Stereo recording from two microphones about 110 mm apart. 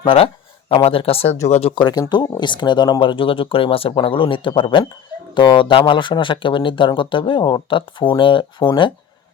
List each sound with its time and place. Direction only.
0.0 s speech: 55° left (ahead or behind)
1.5 s speech: 90° left
1.7 s speech: 40° left (ahead or behind)